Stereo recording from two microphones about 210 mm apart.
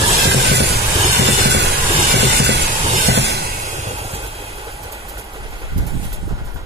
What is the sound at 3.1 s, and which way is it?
Train, 50° right (ahead or behind).